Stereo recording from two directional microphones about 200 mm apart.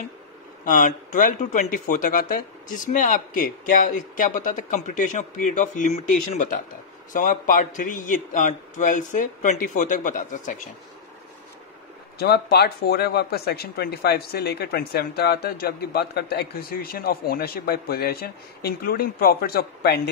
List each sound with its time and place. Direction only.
0.7 s speech: 40° left (ahead or behind)
12.2 s speech: 55° left (ahead or behind)